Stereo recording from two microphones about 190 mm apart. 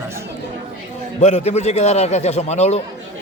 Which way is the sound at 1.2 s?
35° left (ahead or behind).